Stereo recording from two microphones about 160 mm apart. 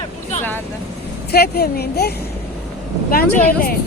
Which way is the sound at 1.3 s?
80° left.